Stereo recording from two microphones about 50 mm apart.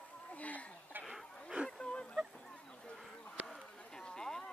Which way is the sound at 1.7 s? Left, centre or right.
Centre.